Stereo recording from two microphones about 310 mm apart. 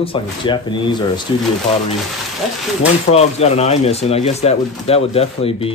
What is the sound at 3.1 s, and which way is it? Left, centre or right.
Speech, centre.